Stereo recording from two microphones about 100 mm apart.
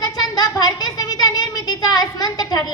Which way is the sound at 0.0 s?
40° left (ahead or behind).